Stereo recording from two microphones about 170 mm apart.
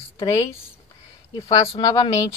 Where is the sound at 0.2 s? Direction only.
20° left (ahead or behind).